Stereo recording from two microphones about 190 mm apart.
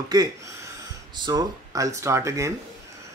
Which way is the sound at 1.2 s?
20° right (ahead or behind).